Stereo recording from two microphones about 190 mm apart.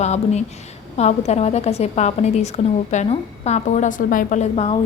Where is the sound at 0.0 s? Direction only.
35° left (ahead or behind).